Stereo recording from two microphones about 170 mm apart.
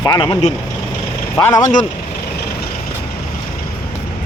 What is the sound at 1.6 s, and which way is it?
Speech, 50° left (ahead or behind).